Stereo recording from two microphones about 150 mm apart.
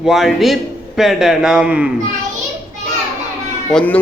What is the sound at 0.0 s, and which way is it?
A man's voice, centre (ahead or behind).